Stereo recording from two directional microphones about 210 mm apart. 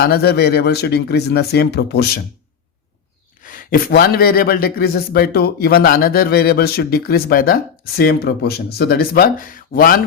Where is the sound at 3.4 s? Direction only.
40° left (ahead or behind).